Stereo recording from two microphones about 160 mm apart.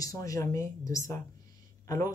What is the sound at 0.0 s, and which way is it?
Speech, 20° left (ahead or behind).